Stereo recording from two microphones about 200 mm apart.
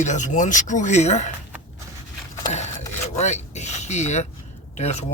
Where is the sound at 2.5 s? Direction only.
35° left (ahead or behind).